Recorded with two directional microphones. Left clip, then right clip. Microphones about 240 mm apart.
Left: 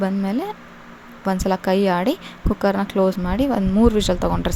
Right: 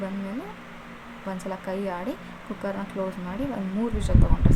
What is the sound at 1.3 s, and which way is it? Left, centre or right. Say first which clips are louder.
Speech: left 12 dB; left.